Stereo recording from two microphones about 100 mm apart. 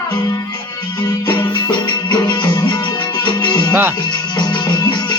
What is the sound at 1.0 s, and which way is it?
Music, 50° left (ahead or behind).